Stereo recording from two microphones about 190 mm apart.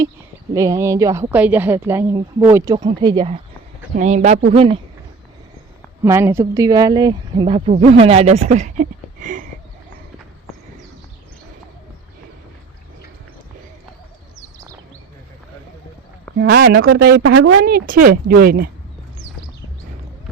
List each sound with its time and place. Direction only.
0.5 s speech: 15° right (ahead or behind)
4.0 s speech: 40° right (ahead or behind)
6.0 s speech: 15° right (ahead or behind); by 9.5 s 40° right (ahead or behind)
16.4 s speech: 55° right (ahead or behind)